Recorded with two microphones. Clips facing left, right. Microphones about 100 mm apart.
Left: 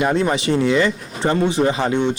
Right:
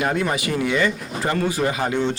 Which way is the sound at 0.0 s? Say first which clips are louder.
Left 4 dB; 25° left (ahead or behind).